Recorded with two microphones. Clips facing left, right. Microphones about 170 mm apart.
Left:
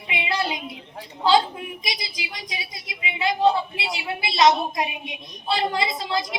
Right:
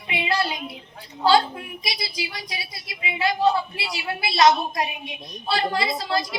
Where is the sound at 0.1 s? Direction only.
20° left (ahead or behind).